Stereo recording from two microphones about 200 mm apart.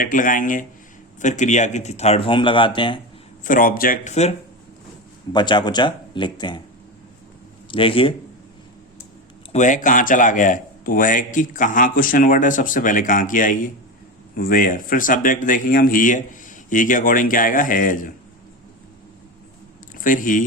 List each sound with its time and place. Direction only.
0.0 s speech: 40° left (ahead or behind); by 3.0 s 25° left (ahead or behind)
3.4 s speech: 45° left (ahead or behind)
5.3 s speech: 20° left (ahead or behind)
7.7 s speech: 25° left (ahead or behind)
9.5 s speech: 40° left (ahead or behind)
20.1 s speech: 40° left (ahead or behind)